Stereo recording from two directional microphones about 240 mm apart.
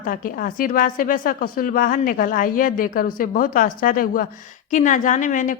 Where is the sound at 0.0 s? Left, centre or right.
Left.